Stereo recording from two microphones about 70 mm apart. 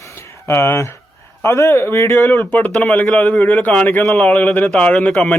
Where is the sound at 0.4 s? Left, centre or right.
Left.